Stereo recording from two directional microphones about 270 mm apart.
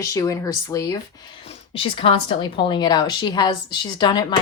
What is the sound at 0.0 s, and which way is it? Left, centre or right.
A woman's voice, centre.